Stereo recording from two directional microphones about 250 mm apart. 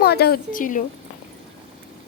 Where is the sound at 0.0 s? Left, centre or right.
Left.